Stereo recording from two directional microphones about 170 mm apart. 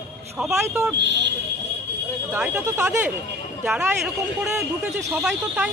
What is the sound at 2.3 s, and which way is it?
Speech, 10° right (ahead or behind).